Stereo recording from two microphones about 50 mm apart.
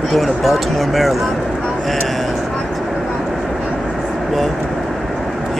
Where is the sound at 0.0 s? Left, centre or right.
Centre.